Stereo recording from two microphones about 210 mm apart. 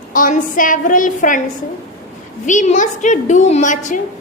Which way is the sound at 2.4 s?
35° left (ahead or behind).